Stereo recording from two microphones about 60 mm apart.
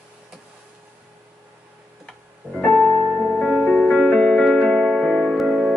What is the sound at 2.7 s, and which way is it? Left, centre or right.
Music, left.